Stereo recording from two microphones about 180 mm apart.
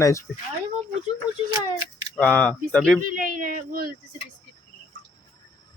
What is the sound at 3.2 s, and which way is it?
Speech, 50° right (ahead or behind).